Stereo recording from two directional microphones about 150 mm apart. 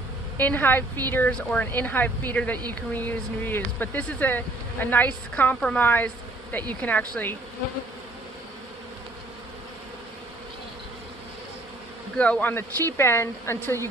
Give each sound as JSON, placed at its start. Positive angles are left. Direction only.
{"t": 0.4, "sound": "a woman's voice", "side_deg": 10}
{"t": 12.2, "sound": "a woman's voice", "side_deg": 10}